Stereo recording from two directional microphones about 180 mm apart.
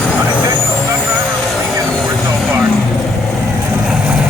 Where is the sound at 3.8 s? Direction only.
5° right (ahead or behind).